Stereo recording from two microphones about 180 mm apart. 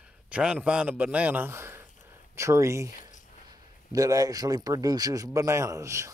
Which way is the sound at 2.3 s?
15° right (ahead or behind).